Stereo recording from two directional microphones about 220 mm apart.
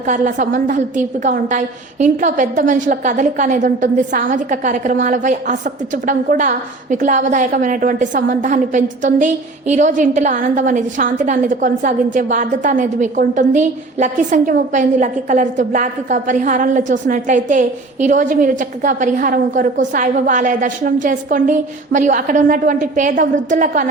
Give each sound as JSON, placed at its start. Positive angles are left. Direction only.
{"t": 0.1, "sound": "a woman's voice", "side_deg": -35}